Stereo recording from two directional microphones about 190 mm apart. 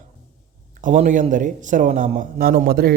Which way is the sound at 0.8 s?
40° right (ahead or behind).